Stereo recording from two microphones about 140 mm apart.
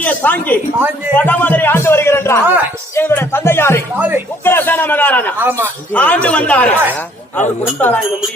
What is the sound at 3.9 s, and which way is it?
Speech, 10° right (ahead or behind).